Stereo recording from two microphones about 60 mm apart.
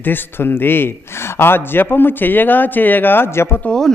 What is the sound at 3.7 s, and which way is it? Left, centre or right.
Speech, centre.